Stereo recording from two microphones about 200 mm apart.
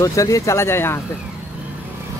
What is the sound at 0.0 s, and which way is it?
Speech, 15° left (ahead or behind).